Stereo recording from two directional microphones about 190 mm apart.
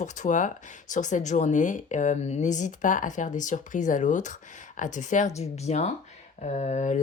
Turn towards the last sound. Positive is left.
turn(degrees=40)  # may be behind; listen again after turning